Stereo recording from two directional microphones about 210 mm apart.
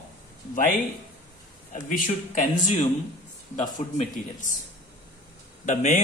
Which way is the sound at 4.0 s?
35° left (ahead or behind).